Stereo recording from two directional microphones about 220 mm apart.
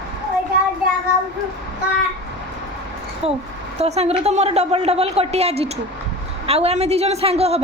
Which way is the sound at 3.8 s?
30° right (ahead or behind).